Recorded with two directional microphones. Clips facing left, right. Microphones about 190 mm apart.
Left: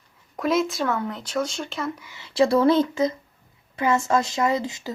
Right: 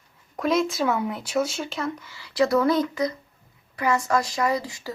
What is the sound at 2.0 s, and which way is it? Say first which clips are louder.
Speech: left 3 dB; 20° left (ahead or behind).